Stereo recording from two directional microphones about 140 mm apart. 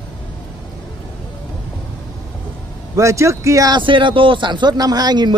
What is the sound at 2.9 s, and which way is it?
A man's voice, 20° right (ahead or behind).